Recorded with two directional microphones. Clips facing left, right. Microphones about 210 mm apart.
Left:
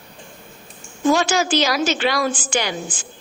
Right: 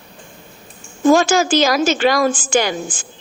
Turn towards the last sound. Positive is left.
turn(degrees=-45)  # may be behind; listen again after turning